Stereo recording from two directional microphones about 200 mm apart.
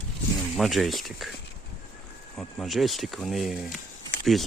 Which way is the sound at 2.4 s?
Centre (ahead or behind).